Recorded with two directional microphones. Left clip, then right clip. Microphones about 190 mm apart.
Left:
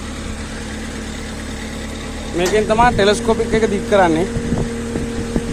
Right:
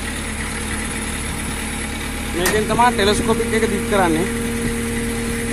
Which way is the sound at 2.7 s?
30° left (ahead or behind).